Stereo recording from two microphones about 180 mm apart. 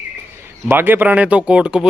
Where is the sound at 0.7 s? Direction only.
10° right (ahead or behind).